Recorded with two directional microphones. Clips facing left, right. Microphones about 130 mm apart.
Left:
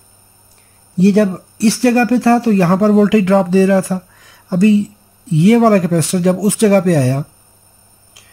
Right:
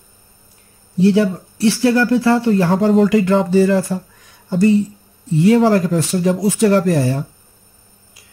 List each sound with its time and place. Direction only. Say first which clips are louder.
0.9 s speech: left 2 dB; 70° left (ahead or behind); by 4.7 s 90° left
5.3 s speech: left 3 dB; 75° left (ahead or behind)